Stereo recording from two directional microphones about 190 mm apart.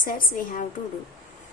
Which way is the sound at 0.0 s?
45° left (ahead or behind).